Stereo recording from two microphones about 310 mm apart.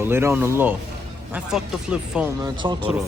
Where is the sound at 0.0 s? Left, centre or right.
Centre.